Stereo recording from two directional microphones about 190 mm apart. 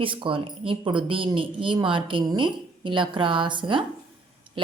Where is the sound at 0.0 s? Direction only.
25° right (ahead or behind).